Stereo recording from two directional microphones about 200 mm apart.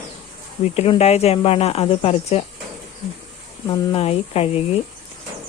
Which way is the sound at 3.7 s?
25° left (ahead or behind).